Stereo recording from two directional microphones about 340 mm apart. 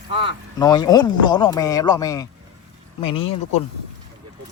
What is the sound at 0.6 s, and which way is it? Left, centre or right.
Speech, centre.